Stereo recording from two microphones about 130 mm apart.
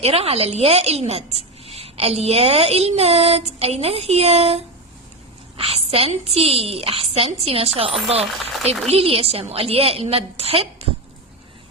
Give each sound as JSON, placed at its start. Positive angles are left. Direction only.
{"t": 0.0, "sound": "a woman's voice", "side_deg": -50}